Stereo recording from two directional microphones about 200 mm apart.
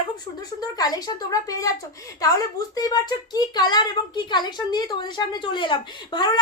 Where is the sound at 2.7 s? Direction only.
20° left (ahead or behind).